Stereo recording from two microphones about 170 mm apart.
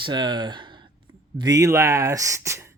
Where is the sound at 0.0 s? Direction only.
25° right (ahead or behind).